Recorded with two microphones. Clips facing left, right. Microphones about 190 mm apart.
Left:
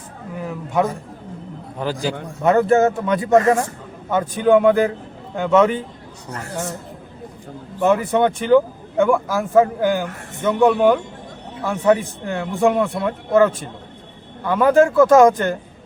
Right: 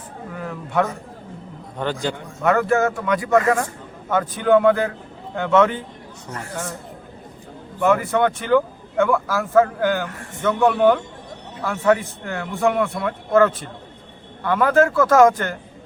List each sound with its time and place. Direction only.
0.3 s a sound: 15° left (ahead or behind)
1.8 s speech: 5° left (ahead or behind)
2.4 s speech: 25° left (ahead or behind)
7.8 s speech: 20° left (ahead or behind)